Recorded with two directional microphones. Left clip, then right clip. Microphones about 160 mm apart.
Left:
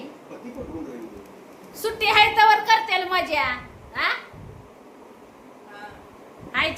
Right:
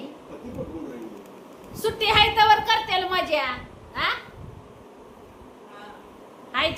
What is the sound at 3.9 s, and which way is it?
Babbling, 10° right (ahead or behind).